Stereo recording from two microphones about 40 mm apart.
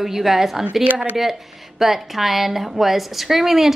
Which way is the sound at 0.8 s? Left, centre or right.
Right.